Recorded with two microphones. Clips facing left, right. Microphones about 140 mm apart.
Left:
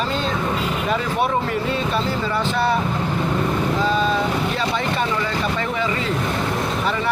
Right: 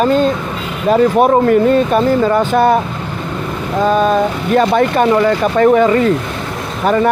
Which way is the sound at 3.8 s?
50° right (ahead or behind).